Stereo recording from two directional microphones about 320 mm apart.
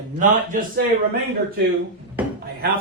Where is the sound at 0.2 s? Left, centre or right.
Right.